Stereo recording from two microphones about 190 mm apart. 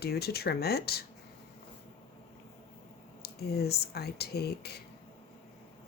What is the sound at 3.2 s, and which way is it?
A woman's voice, 55° left (ahead or behind).